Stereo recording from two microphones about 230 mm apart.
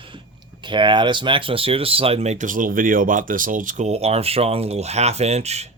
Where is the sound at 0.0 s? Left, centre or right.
Right.